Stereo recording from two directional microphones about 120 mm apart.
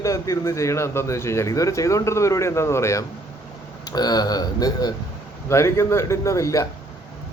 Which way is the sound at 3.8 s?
35° left (ahead or behind).